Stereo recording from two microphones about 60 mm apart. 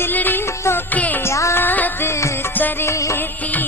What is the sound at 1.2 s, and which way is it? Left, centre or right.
Music, left.